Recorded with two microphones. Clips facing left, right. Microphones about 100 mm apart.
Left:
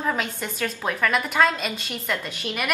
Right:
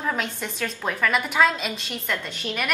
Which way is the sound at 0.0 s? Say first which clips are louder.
Left 1 dB; centre (ahead or behind).